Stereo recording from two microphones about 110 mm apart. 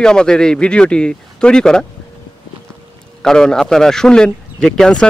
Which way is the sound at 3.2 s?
5° left (ahead or behind).